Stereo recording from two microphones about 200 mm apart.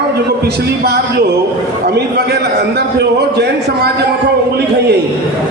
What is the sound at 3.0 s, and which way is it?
Speech, 55° right (ahead or behind).